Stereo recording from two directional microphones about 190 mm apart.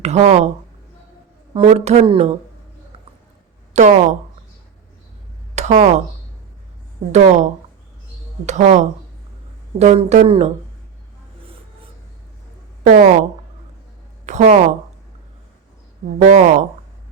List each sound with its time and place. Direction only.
0.0 s speech: 35° right (ahead or behind)
1.5 s speech: 35° right (ahead or behind)
3.8 s speech: 35° right (ahead or behind)
5.5 s speech: 40° right (ahead or behind)
7.1 s speech: 35° right (ahead or behind)
8.4 s speech: 40° right (ahead or behind)
12.8 s a woman's voice: 45° right (ahead or behind)
14.3 s speech: 40° right (ahead or behind)
16.1 s speech: 40° right (ahead or behind)